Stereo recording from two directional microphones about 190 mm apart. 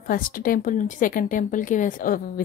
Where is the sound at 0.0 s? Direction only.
50° left (ahead or behind).